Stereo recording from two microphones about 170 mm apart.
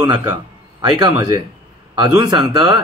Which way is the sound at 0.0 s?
25° right (ahead or behind).